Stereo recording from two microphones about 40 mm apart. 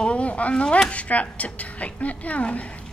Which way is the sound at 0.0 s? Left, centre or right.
Left.